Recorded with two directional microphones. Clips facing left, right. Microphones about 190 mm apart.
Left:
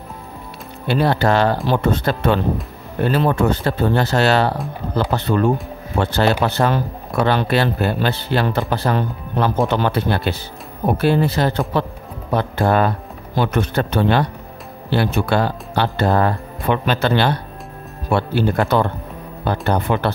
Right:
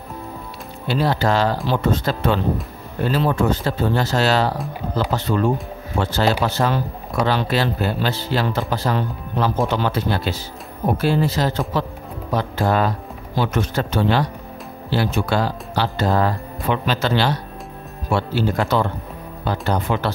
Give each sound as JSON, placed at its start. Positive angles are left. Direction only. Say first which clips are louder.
{"t": 0.8, "sound": "speech", "louder": "left 3 dB", "side_deg": 60}